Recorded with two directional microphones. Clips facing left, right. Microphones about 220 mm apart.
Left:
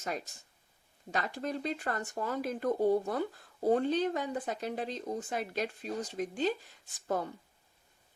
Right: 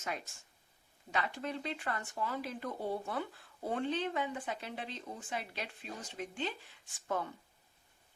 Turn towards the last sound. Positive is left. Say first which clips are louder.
# left 4 dB
turn(degrees=40)  # may be behind; listen again after turning